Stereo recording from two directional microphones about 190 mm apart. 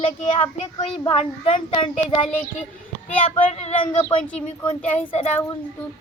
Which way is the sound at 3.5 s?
35° left (ahead or behind).